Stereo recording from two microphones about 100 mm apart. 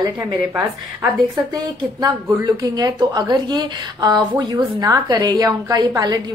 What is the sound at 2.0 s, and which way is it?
A woman's voice, 40° right (ahead or behind).